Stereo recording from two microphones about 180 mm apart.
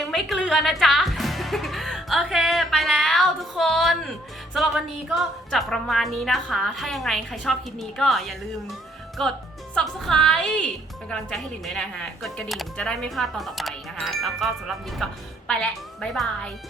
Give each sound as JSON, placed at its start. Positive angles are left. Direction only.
{"t": 0.0, "sound": "speech", "side_deg": 0}